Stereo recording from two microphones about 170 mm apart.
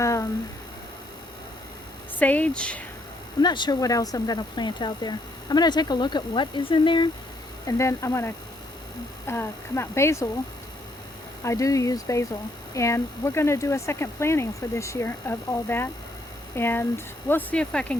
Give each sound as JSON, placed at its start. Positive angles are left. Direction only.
{"t": 0.0, "sound": "a sound", "side_deg": 15}
{"t": 2.1, "sound": "speech", "side_deg": 10}
{"t": 3.4, "sound": "speech", "side_deg": 25}
{"t": 7.7, "sound": "speech", "side_deg": 15}
{"t": 11.4, "sound": "speech", "side_deg": 20}